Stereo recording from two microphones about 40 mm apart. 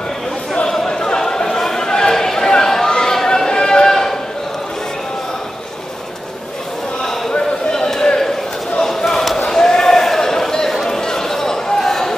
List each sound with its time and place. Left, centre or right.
0.7 s chatter: centre
7.7 s a sound: centre
8.8 s basketball bounce: centre